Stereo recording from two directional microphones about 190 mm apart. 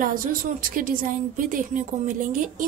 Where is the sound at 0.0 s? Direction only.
45° right (ahead or behind).